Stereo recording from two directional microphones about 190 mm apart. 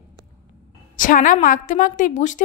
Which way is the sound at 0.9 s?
45° left (ahead or behind).